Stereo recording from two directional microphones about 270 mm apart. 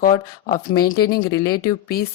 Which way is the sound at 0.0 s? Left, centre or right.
Left.